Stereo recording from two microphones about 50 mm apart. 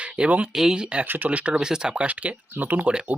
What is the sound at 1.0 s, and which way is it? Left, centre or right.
Speech, right.